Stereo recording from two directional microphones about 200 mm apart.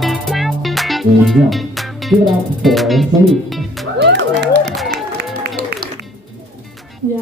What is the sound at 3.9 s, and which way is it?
Music, 60° right (ahead or behind).